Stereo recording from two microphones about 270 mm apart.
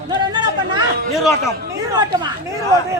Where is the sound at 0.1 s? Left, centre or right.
Centre.